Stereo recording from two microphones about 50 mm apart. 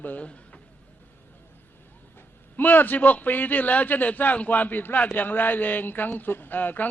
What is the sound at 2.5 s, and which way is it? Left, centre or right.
A man's voice, left.